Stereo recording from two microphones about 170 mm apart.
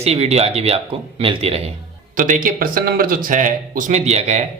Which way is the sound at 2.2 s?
50° right (ahead or behind).